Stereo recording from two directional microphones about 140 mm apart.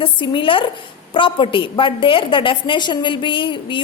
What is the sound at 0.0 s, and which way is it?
A woman's voice, 40° left (ahead or behind).